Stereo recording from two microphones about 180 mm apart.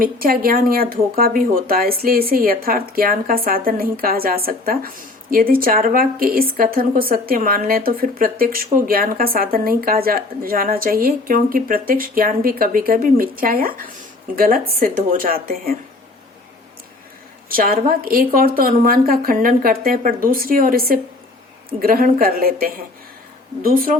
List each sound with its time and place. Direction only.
0.0 s a woman's voice: 55° right (ahead or behind)
17.5 s a woman's voice: 55° right (ahead or behind)